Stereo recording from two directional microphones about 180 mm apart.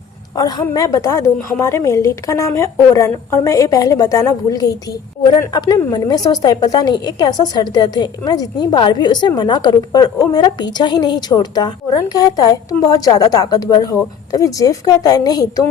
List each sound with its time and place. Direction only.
0.3 s a woman's voice: 20° left (ahead or behind)